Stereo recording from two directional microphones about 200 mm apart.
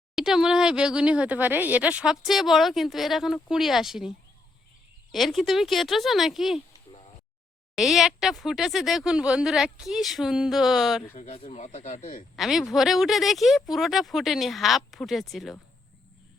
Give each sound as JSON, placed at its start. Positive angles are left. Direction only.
{"t": 0.2, "sound": "speech", "side_deg": 0}
{"t": 5.1, "sound": "speech", "side_deg": 0}
{"t": 7.8, "sound": "speech", "side_deg": 0}
{"t": 11.1, "sound": "speech", "side_deg": 40}
{"t": 12.4, "sound": "speech", "side_deg": 0}